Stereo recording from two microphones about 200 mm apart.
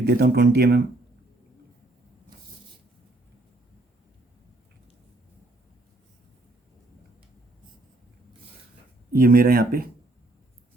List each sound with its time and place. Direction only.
0.0 s speech: 55° right (ahead or behind)
9.1 s speech: 45° right (ahead or behind)